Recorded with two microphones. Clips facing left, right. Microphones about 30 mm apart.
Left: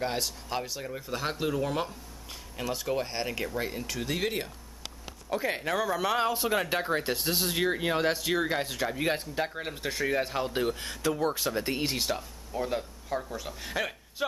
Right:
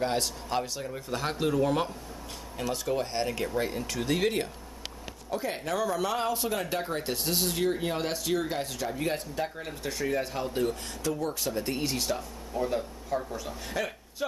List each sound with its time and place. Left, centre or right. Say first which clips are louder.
0.0 s speech: right 2 dB; centre
5.3 s speech: left 2 dB; centre
7.5 s speech: left 1 dB; left